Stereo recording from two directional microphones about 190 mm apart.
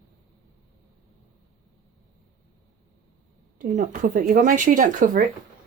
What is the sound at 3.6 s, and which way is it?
Speech, 45° right (ahead or behind).